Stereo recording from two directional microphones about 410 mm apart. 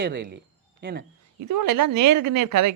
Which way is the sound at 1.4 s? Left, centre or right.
Right.